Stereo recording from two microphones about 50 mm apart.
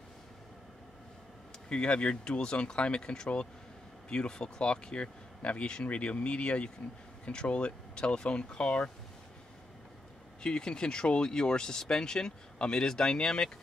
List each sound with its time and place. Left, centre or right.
1.7 s speech: left
10.4 s speech: centre